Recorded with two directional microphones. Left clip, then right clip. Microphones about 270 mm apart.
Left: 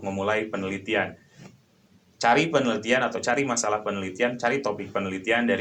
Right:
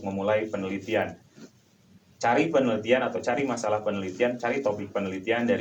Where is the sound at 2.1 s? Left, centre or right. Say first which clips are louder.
Left 2 dB; left.